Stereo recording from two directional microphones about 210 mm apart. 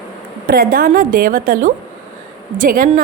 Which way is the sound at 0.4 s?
45° right (ahead or behind).